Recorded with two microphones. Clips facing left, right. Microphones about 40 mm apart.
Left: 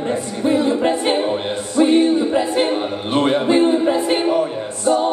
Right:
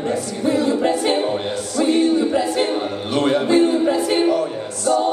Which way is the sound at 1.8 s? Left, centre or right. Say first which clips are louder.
Left 3 dB; left.